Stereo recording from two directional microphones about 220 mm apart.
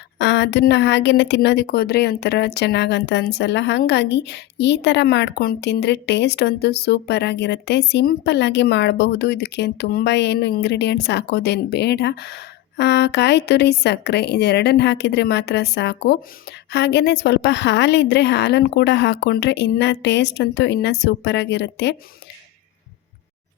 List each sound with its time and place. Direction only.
0.2 s a woman's voice: 50° left (ahead or behind)